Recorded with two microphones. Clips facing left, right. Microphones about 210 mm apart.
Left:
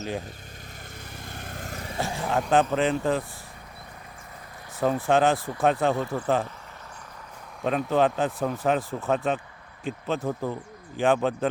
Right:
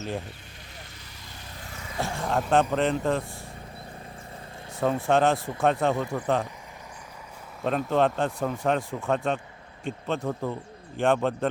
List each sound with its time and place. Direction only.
1.2 s vehicle: 50° left (ahead or behind)
2.0 s speech: centre (ahead or behind)
4.8 s speech: centre (ahead or behind)
7.6 s speech: centre (ahead or behind)